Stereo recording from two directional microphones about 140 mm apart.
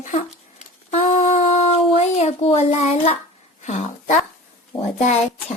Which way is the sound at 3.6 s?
60° left (ahead or behind).